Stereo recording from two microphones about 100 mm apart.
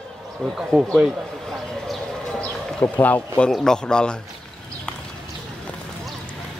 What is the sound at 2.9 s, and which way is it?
Speech, 15° left (ahead or behind).